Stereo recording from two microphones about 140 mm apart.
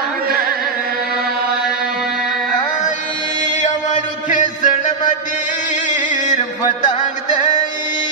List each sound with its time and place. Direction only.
3.9 s chant: 65° left (ahead or behind)
7.0 s music: 65° left (ahead or behind)